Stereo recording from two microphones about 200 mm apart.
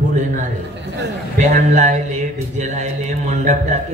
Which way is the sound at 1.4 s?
40° right (ahead or behind).